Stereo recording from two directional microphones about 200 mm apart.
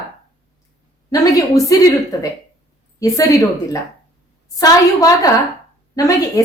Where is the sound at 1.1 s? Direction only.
15° left (ahead or behind).